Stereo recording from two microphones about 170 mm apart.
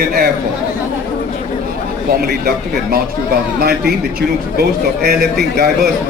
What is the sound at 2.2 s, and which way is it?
A man's voice, 65° right (ahead or behind).